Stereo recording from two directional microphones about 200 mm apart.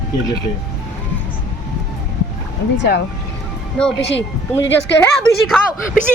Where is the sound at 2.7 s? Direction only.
60° left (ahead or behind).